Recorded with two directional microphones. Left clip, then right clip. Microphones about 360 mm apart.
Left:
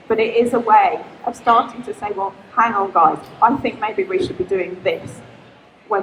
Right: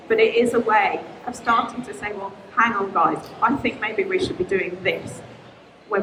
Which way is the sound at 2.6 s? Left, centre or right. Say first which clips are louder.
Left 4 dB; centre.